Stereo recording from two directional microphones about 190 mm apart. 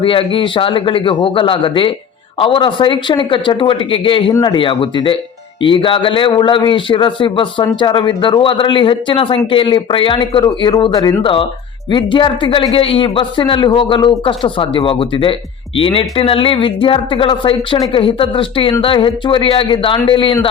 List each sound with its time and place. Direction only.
0.0 s a man's voice: 30° left (ahead or behind)